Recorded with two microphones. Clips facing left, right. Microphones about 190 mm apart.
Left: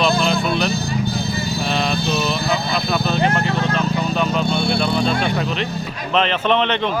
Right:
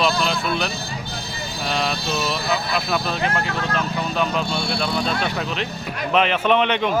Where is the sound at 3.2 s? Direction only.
25° left (ahead or behind).